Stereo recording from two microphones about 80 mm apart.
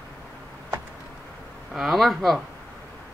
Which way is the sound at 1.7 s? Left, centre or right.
Centre.